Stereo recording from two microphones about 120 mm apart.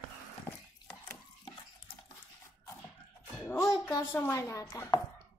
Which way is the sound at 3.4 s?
25° left (ahead or behind).